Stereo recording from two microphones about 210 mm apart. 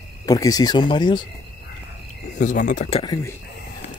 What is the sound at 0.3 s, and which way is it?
Speech, 15° left (ahead or behind).